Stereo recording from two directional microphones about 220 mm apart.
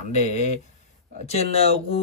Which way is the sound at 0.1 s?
30° left (ahead or behind).